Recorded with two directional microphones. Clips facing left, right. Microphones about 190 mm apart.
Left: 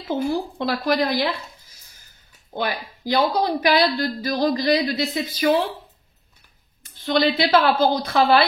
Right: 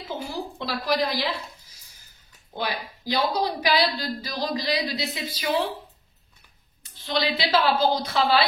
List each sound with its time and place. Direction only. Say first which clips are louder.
0.1 s a woman's voice: left 9 dB; 50° left (ahead or behind)
2.5 s a woman's voice: left 4 dB; 50° left (ahead or behind)
6.8 s a woman's voice: left 7 dB; 50° left (ahead or behind)